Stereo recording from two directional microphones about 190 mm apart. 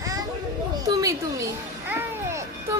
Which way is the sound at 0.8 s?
15° right (ahead or behind).